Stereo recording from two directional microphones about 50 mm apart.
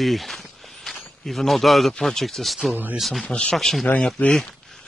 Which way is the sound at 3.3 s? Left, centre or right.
Left.